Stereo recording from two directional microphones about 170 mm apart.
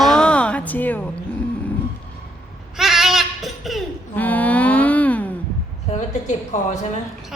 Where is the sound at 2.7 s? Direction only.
Centre (ahead or behind).